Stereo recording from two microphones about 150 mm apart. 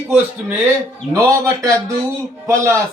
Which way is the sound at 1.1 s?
20° right (ahead or behind).